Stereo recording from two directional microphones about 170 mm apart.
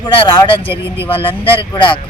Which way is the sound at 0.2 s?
30° left (ahead or behind).